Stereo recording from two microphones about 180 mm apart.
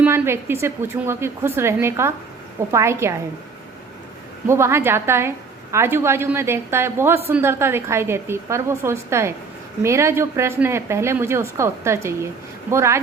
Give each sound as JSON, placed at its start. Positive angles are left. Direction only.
{"t": 0.0, "sound": "speech", "side_deg": -15}
{"t": 4.4, "sound": "speech", "side_deg": -15}